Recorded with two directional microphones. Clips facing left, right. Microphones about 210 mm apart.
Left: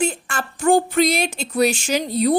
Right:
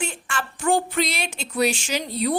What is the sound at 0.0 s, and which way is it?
Speech, 40° left (ahead or behind).